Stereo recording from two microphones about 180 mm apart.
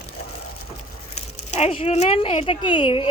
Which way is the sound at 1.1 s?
35° left (ahead or behind).